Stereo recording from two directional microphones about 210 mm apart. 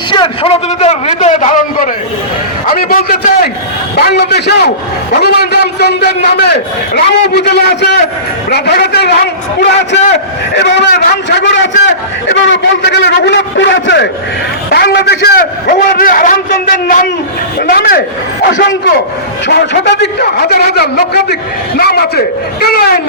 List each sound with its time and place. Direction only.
0.1 s a man's voice: 25° left (ahead or behind); by 23.0 s 45° left (ahead or behind)